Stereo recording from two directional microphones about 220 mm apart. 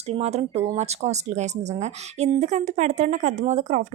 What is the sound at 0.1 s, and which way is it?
Speech, 30° right (ahead or behind).